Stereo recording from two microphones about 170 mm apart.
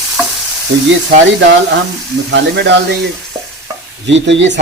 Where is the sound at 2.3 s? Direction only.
90° right.